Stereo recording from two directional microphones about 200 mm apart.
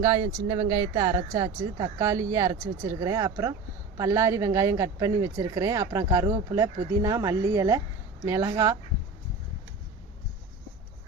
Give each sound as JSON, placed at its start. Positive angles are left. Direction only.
{"t": 0.0, "sound": "speech", "side_deg": -15}